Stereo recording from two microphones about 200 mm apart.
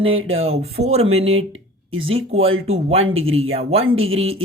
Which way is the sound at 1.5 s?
85° right.